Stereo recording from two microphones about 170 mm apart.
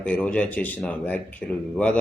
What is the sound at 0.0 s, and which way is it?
A man's voice, 10° left (ahead or behind).